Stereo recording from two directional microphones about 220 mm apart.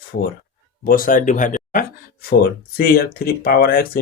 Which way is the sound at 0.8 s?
40° left (ahead or behind).